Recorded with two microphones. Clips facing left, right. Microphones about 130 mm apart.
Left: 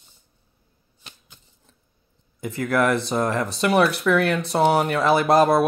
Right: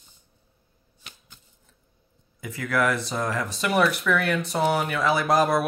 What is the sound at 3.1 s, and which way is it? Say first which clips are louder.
Speech: left 6 dB; 40° left (ahead or behind).